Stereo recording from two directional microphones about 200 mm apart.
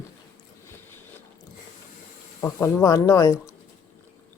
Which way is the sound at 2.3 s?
15° left (ahead or behind).